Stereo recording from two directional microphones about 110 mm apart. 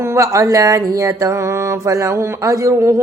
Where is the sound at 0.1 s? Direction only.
30° right (ahead or behind).